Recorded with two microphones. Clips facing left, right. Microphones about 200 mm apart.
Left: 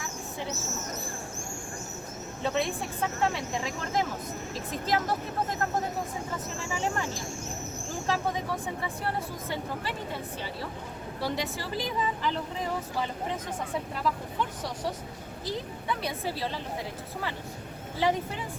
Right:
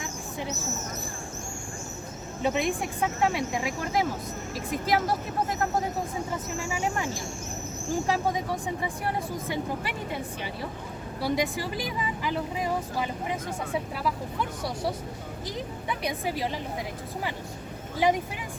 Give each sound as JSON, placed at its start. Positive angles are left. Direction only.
{"t": 2.4, "sound": "a woman's voice", "side_deg": -15}
{"t": 6.7, "sound": "a woman's voice", "side_deg": -15}
{"t": 8.6, "sound": "a woman's voice", "side_deg": -15}
{"t": 15.4, "sound": "a woman's voice", "side_deg": -15}
{"t": 18.0, "sound": "a woman's voice", "side_deg": -15}